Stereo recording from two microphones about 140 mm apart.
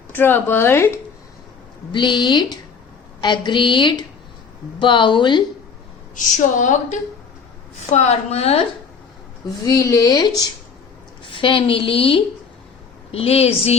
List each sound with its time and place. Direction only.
0.1 s a woman's voice: 15° left (ahead or behind)
1.9 s a woman's voice: 35° left (ahead or behind)
6.1 s a woman's voice: 65° left (ahead or behind)
7.9 s a woman's voice: 50° left (ahead or behind)
9.6 s a woman's voice: 25° left (ahead or behind); by 13.7 s 45° left (ahead or behind)